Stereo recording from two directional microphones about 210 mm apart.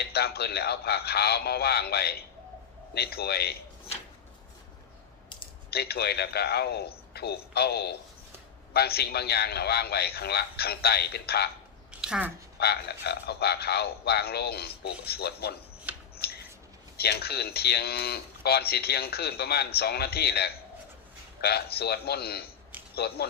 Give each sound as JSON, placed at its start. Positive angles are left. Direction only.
{"t": 0.0, "sound": "a man's voice", "side_deg": 50}
{"t": 5.7, "sound": "a man's voice", "side_deg": 50}
{"t": 11.9, "sound": "a sound", "side_deg": -5}
{"t": 12.5, "sound": "a man's voice", "side_deg": 50}
{"t": 15.9, "sound": "a sound", "side_deg": -5}
{"t": 17.0, "sound": "a man's voice", "side_deg": 50}